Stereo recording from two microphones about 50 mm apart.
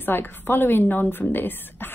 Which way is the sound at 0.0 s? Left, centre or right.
Left.